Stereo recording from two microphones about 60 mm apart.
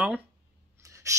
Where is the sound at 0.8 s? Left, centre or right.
Right.